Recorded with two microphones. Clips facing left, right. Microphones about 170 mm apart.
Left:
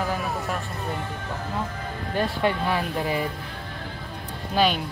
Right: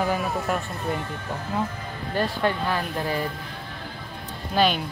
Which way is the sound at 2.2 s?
10° left (ahead or behind).